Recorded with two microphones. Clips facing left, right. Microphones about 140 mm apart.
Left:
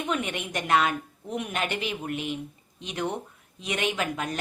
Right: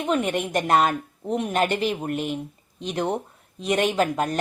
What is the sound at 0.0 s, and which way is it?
Speech, 40° right (ahead or behind).